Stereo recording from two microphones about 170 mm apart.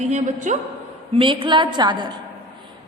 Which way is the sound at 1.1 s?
30° right (ahead or behind).